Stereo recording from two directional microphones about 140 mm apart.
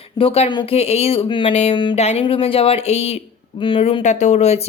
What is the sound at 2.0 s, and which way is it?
A woman's voice, 50° left (ahead or behind).